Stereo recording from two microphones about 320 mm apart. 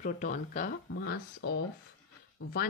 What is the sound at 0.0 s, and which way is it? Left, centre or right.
Speech, left.